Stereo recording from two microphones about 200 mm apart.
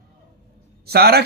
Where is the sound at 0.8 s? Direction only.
50° right (ahead or behind).